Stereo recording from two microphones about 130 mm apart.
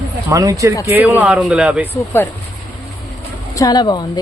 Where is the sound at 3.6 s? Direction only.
30° left (ahead or behind).